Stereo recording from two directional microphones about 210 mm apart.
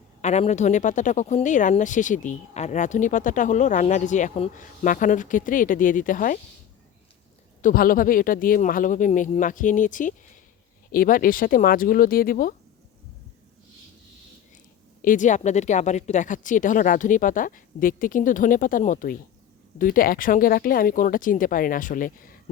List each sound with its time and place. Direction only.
0.2 s speech: 35° left (ahead or behind)
7.6 s speech: 40° left (ahead or behind)
15.0 s speech: 40° left (ahead or behind)